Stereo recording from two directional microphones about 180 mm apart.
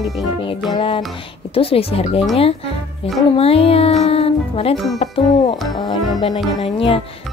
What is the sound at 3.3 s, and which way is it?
Speech, 30° left (ahead or behind).